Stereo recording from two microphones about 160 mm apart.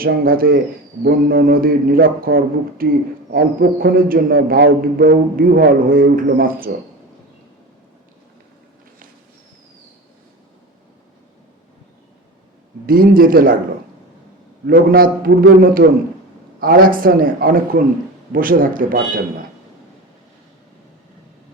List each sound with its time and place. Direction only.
0.0 s a man's voice: 65° right (ahead or behind)
12.8 s a man's voice: 65° right (ahead or behind)
14.7 s a man's voice: 65° right (ahead or behind)